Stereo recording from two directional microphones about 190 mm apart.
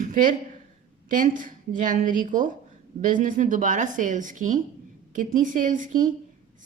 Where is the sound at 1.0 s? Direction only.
45° right (ahead or behind).